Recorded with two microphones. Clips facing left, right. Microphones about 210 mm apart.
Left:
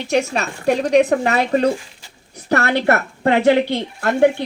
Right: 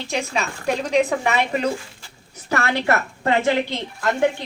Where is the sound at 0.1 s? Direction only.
70° left (ahead or behind).